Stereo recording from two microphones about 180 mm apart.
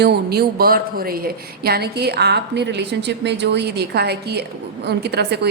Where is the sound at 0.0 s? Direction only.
65° right (ahead or behind).